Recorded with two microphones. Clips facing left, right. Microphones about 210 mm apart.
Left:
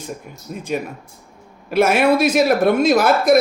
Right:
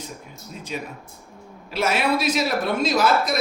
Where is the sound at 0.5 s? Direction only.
55° left (ahead or behind).